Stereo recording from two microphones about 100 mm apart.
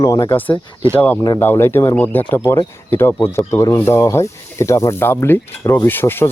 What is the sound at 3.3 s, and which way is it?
Speech, 30° left (ahead or behind).